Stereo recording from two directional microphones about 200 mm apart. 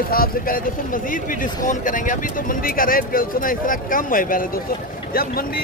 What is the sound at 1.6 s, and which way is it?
Speech, 40° left (ahead or behind).